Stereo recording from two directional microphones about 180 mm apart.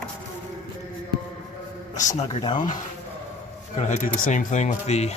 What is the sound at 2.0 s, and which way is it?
Speech, 40° left (ahead or behind).